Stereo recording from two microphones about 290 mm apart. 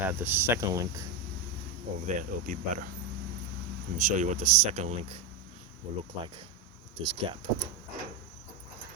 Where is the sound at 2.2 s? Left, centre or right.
Right.